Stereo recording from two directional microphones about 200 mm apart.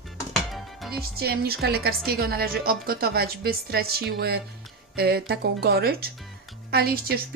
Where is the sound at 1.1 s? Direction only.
50° right (ahead or behind).